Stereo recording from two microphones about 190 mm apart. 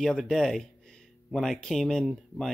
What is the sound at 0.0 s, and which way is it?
Speech, centre (ahead or behind).